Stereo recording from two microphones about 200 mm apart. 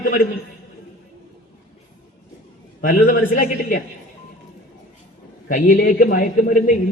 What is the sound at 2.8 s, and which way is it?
A man's voice, 45° left (ahead or behind).